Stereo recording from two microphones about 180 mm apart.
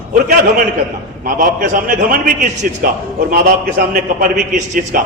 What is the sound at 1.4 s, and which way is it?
Speech, 45° right (ahead or behind).